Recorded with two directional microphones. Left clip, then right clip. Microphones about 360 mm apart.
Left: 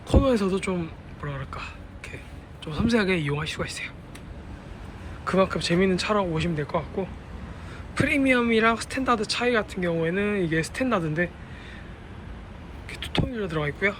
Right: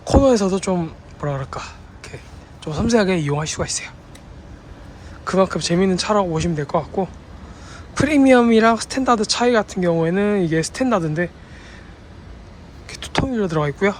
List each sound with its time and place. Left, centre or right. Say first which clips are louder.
0.0 s speech: right 8 dB; centre
5.2 s speech: right 5 dB; centre
12.9 s speech: right 7 dB; centre